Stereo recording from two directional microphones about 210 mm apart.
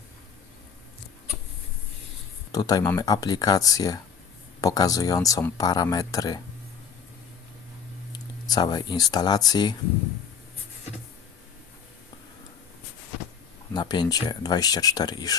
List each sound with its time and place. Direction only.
2.5 s speech: 15° left (ahead or behind)
8.1 s speech: 20° left (ahead or behind)
13.7 s speech: 20° left (ahead or behind)